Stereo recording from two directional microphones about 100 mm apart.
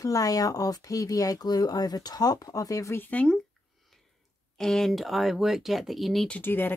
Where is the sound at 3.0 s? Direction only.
15° left (ahead or behind).